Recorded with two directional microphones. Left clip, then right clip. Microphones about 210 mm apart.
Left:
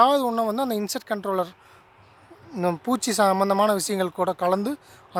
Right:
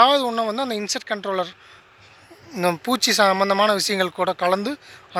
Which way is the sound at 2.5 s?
15° left (ahead or behind).